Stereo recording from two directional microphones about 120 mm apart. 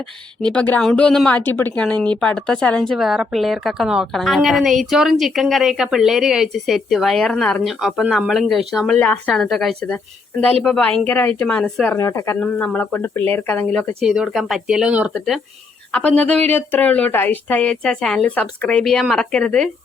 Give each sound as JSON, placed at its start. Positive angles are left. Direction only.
{"t": 0.5, "sound": "a woman's voice", "side_deg": 10}
{"t": 9.0, "sound": "a woman's voice", "side_deg": 10}
{"t": 11.9, "sound": "a woman's voice", "side_deg": 25}
{"t": 15.1, "sound": "a woman's voice", "side_deg": 5}